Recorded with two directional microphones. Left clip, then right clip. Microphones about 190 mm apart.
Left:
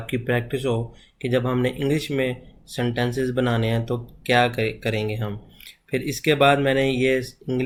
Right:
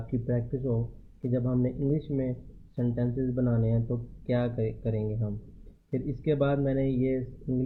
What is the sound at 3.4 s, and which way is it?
Speech, 15° left (ahead or behind).